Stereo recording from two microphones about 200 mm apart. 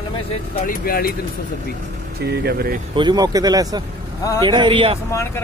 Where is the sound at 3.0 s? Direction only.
20° right (ahead or behind).